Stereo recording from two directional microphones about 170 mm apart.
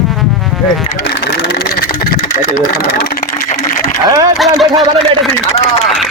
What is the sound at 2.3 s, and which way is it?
Speech, 50° left (ahead or behind).